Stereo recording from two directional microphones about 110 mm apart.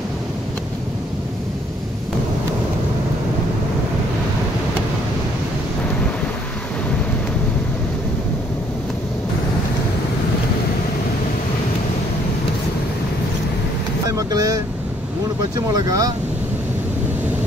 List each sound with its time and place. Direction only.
14.0 s vehicle: 35° right (ahead or behind)